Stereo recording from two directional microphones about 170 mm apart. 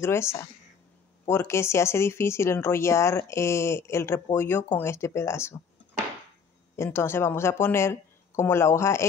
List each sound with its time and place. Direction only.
0.0 s speech: 15° left (ahead or behind)
6.8 s speech: 15° left (ahead or behind)